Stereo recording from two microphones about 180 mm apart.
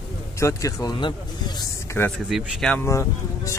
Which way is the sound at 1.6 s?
10° left (ahead or behind).